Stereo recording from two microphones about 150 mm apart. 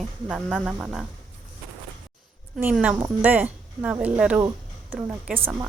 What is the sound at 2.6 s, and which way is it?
Speech, centre (ahead or behind).